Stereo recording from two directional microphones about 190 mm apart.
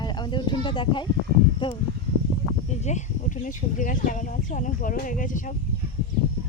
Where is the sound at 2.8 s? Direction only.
40° left (ahead or behind).